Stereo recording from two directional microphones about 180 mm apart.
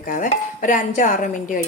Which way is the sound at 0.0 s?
45° left (ahead or behind).